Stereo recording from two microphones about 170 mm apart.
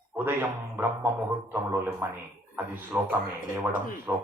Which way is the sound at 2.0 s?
15° right (ahead or behind).